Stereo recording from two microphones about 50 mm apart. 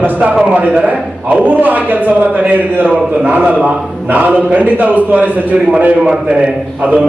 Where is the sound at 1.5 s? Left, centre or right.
Right.